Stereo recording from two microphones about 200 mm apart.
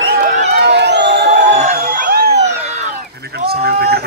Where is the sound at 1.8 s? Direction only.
50° right (ahead or behind).